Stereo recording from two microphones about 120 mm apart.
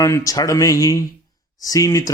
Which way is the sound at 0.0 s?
25° left (ahead or behind).